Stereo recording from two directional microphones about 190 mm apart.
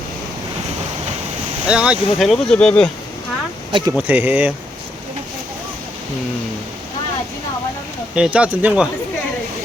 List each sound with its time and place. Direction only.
1.6 s speech: 5° right (ahead or behind)
3.7 s speech: 25° right (ahead or behind)
3.9 s speech: 10° right (ahead or behind)
8.1 s speech: 5° right (ahead or behind)